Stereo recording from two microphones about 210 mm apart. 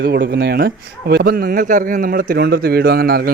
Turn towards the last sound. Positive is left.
turn(degrees=-45)  # may be behind; listen again after turning